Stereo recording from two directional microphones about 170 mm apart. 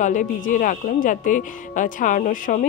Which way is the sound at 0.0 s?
50° left (ahead or behind).